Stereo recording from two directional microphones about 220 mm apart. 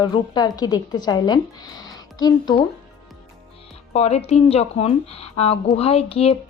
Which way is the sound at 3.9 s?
30° left (ahead or behind).